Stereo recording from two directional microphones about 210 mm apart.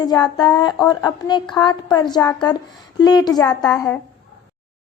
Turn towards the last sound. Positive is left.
turn(degrees=15)  # may be behind; listen again after turning